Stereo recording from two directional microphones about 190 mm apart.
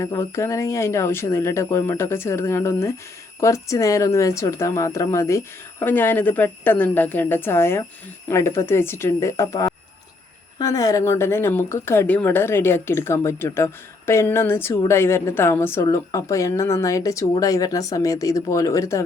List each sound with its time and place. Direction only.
0.0 s a woman's voice: 15° left (ahead or behind)